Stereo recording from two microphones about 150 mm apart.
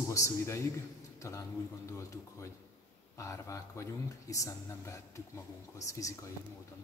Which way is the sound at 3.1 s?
20° left (ahead or behind).